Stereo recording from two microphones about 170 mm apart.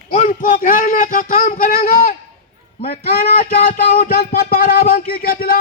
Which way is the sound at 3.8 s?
55° left (ahead or behind).